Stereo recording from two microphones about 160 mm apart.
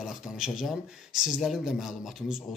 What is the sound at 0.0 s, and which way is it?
Speech, centre (ahead or behind).